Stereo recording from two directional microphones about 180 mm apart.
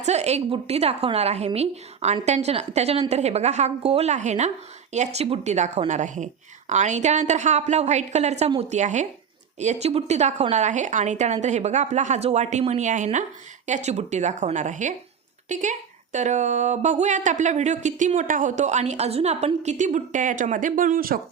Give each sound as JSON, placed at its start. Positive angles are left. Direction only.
{"t": 0.0, "sound": "speech", "side_deg": -40}